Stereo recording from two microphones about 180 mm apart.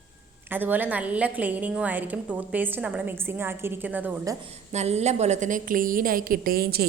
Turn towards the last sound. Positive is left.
turn(degrees=-60)  # may be behind; listen again after turning